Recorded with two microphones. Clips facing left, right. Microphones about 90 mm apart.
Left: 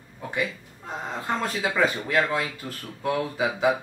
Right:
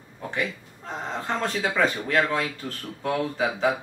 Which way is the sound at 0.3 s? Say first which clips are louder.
Left 1 dB; 10° left (ahead or behind).